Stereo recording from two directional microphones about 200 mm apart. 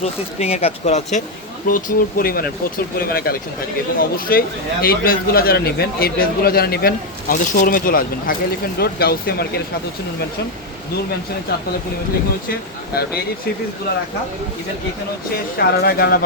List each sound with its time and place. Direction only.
0.0 s speech: 30° left (ahead or behind)
1.6 s speech: 45° left (ahead or behind)
12.5 s speech: 50° left (ahead or behind)
15.5 s speech: 50° left (ahead or behind)